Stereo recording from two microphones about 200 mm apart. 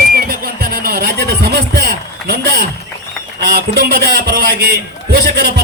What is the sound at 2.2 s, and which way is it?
A man's voice, 50° right (ahead or behind).